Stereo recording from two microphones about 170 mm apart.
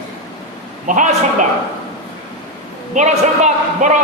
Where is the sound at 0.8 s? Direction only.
50° right (ahead or behind).